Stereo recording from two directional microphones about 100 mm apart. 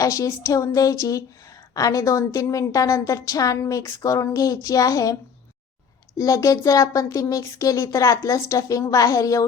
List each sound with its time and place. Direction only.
0.0 s a woman's voice: 35° left (ahead or behind)
6.1 s a woman's voice: 35° left (ahead or behind)